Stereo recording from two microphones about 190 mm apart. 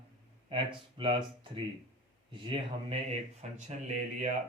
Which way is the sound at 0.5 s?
25° right (ahead or behind).